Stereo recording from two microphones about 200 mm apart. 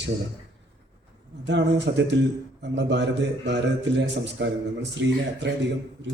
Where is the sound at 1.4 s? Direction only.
60° right (ahead or behind).